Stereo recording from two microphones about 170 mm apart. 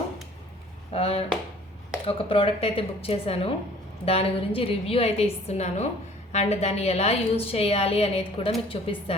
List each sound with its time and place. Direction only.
0.9 s a woman's voice: 35° left (ahead or behind)